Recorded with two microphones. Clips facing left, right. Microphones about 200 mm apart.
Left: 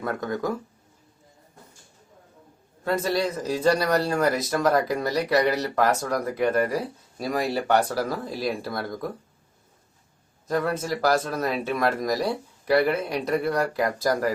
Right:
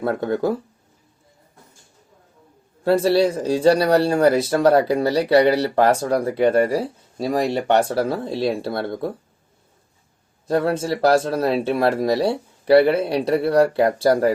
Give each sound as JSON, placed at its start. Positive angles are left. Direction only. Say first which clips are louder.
{"t": 0.0, "sound": "speech", "louder": "right 7 dB", "side_deg": -30}
{"t": 2.8, "sound": "speech", "louder": "right 8 dB", "side_deg": -30}
{"t": 10.4, "sound": "speech", "louder": "right 5 dB", "side_deg": -30}